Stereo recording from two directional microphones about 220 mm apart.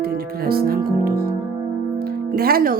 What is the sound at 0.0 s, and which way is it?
Speech, 45° right (ahead or behind).